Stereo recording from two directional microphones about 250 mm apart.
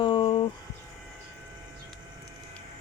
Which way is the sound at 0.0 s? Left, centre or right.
Left.